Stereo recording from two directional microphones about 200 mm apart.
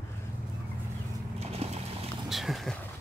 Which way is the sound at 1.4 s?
30° right (ahead or behind).